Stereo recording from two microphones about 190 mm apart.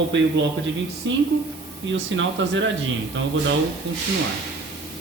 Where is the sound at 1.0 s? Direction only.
75° right (ahead or behind).